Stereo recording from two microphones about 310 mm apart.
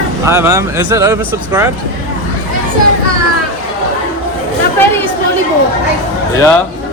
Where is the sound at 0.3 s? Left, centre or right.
Centre.